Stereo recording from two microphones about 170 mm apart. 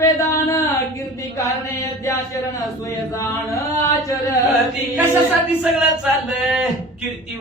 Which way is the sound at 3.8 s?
20° left (ahead or behind).